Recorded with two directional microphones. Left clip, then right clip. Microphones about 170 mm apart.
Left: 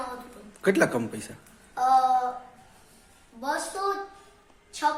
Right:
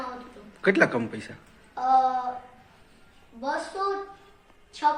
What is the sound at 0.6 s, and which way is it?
Speech, 10° left (ahead or behind).